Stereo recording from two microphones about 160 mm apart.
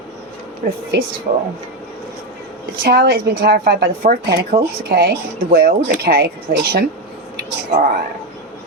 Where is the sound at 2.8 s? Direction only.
80° right.